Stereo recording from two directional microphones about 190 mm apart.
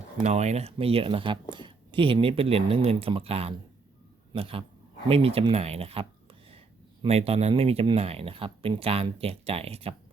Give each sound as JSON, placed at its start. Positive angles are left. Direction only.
{"t": 0.2, "sound": "a man's voice", "side_deg": -35}